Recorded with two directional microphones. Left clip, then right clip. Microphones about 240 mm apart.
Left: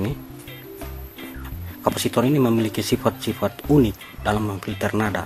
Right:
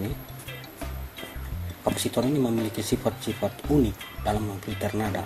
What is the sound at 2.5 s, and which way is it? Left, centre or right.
Speech, centre.